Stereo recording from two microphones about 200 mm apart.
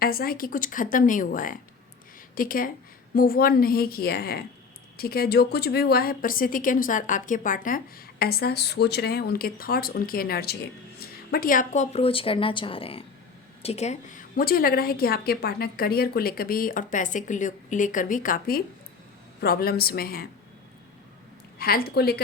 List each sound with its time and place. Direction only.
0.0 s a woman's voice: 50° left (ahead or behind)
21.6 s a woman's voice: 50° left (ahead or behind)